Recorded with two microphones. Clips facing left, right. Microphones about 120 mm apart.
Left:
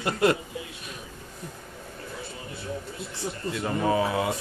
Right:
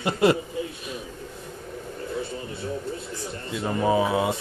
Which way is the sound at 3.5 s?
10° right (ahead or behind).